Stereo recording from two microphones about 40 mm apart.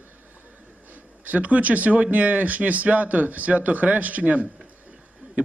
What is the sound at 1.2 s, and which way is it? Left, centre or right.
Speech, right.